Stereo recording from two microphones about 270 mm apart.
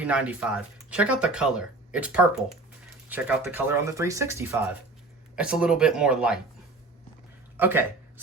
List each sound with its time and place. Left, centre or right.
0.0 s speech: centre
7.5 s speech: centre